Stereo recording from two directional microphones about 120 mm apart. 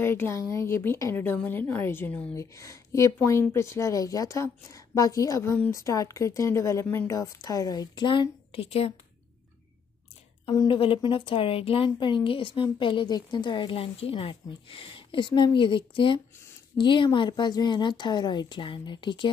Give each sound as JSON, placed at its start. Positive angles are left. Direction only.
{"t": 0.0, "sound": "speech", "side_deg": 20}
{"t": 2.3, "sound": "speech", "side_deg": 25}
{"t": 10.5, "sound": "a woman's voice", "side_deg": 35}
{"t": 10.8, "sound": "a woman's voice", "side_deg": 45}